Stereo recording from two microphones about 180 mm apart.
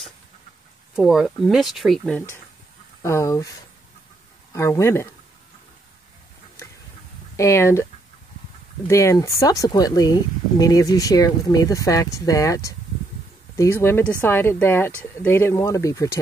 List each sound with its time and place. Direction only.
0.9 s speech: centre (ahead or behind); by 5.1 s 15° left (ahead or behind)
7.3 s speech: 15° left (ahead or behind)
8.8 s speech: 15° left (ahead or behind)